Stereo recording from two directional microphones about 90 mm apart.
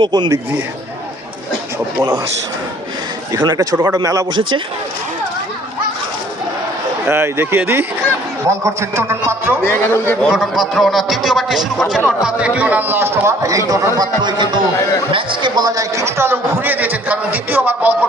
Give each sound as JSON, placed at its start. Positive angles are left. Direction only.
{"t": 0.0, "sound": "speech", "side_deg": -60}
{"t": 3.3, "sound": "a man's voice", "side_deg": -45}
{"t": 7.1, "sound": "a man's voice", "side_deg": -25}
{"t": 9.6, "sound": "a man's voice", "side_deg": 25}
{"t": 10.2, "sound": "a man's voice", "side_deg": -5}
{"t": 14.2, "sound": "a man's voice", "side_deg": -60}